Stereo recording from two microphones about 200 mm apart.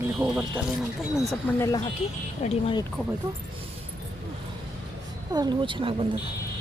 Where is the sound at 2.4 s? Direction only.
25° left (ahead or behind).